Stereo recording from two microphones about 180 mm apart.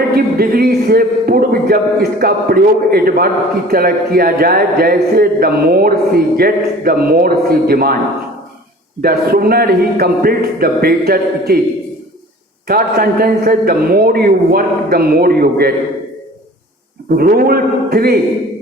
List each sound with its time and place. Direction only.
0.1 s speech: 55° right (ahead or behind)
9.0 s speech: 55° right (ahead or behind)
12.6 s speech: 55° right (ahead or behind)
17.1 s speech: 55° right (ahead or behind)